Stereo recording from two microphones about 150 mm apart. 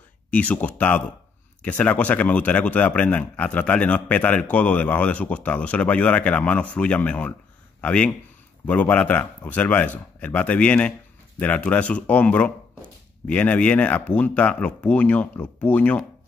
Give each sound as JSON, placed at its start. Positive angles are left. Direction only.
{"t": 0.3, "sound": "a man's voice", "side_deg": 10}